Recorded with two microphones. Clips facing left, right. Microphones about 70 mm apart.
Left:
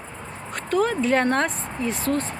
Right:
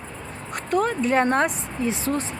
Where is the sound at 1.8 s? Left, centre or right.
Right.